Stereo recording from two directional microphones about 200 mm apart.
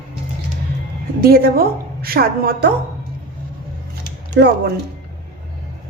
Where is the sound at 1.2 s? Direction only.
50° right (ahead or behind).